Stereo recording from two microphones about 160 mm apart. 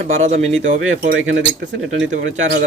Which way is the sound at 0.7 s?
65° right (ahead or behind).